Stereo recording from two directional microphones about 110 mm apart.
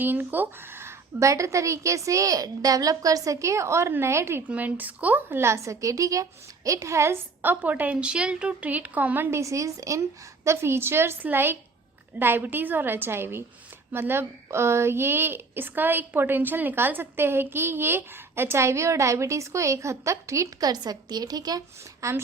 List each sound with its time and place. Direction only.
0.0 s a woman's voice: 15° right (ahead or behind)
9.4 s a woman's voice: 30° right (ahead or behind)